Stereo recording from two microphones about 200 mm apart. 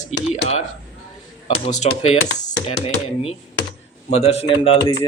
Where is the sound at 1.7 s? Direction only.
35° left (ahead or behind).